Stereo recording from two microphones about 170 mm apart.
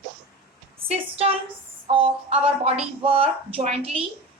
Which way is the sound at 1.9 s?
35° right (ahead or behind).